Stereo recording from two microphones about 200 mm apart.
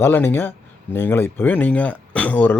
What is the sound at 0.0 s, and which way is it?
Speech, 10° left (ahead or behind).